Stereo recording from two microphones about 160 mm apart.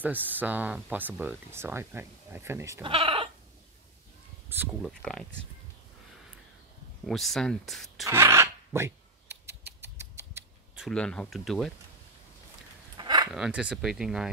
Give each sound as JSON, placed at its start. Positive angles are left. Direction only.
{"t": 0.0, "sound": "speech", "side_deg": -10}
{"t": 2.8, "sound": "speech", "side_deg": -35}
{"t": 4.8, "sound": "speech", "side_deg": 0}
{"t": 7.1, "sound": "speech", "side_deg": 0}
{"t": 8.1, "sound": "speech", "side_deg": -15}
{"t": 9.3, "sound": "a sound", "side_deg": -90}
{"t": 9.9, "sound": "scissors", "side_deg": -15}
{"t": 10.9, "sound": "speech", "side_deg": 5}
{"t": 12.9, "sound": "a sound", "side_deg": -25}
{"t": 13.3, "sound": "speech", "side_deg": -5}